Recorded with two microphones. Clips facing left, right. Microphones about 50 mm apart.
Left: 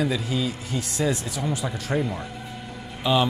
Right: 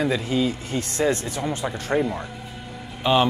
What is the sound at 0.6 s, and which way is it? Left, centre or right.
Speech, right.